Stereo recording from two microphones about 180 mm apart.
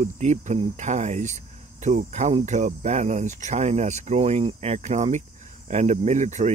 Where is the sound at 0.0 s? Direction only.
40° right (ahead or behind).